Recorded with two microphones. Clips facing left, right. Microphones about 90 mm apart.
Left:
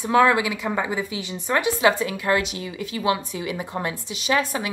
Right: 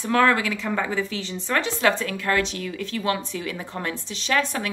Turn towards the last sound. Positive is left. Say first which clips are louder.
# left 1 dB
turn(degrees=10)  # may be behind; listen again after turning